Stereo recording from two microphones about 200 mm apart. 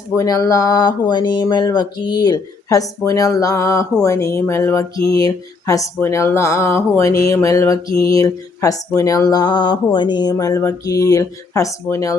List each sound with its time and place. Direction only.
0.2 s speech: 15° left (ahead or behind)